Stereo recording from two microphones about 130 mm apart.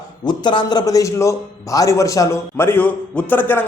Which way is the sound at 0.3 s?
35° left (ahead or behind).